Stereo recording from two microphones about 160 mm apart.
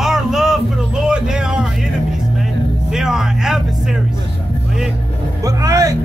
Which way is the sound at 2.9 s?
5° right (ahead or behind).